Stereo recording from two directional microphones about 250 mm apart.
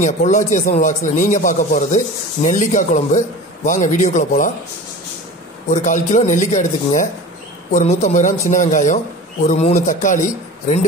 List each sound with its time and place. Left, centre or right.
0.0 s a man's voice: left
5.7 s a man's voice: left